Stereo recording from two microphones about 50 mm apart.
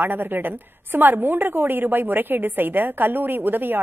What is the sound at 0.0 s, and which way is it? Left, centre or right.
A woman's voice, right.